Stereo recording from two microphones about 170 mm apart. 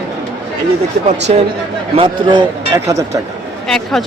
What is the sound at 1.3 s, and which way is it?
Speech, 40° right (ahead or behind).